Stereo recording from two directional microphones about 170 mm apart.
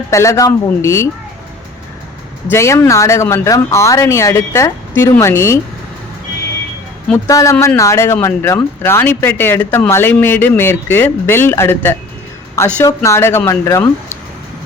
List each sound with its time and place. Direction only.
0.1 s speech: 15° left (ahead or behind)
2.5 s speech: 15° left (ahead or behind)
7.3 s speech: 20° left (ahead or behind)
7.5 s speech: 5° left (ahead or behind)
7.8 s speech: 15° left (ahead or behind)